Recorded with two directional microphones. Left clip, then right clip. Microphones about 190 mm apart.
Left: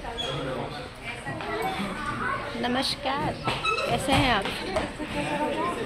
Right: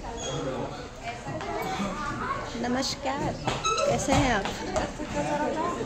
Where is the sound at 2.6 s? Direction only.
10° right (ahead or behind).